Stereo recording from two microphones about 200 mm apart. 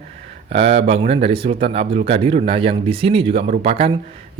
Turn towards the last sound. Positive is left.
turn(degrees=-30)  # may be behind; listen again after turning